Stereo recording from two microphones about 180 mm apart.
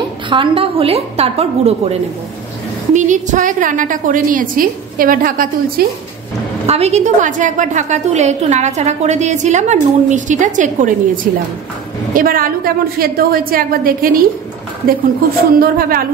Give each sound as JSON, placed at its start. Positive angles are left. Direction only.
{"t": 0.3, "sound": "a woman's voice", "side_deg": -30}
{"t": 6.6, "sound": "a woman's voice", "side_deg": -35}
{"t": 12.1, "sound": "a woman's voice", "side_deg": -50}
{"t": 15.6, "sound": "speech", "side_deg": -55}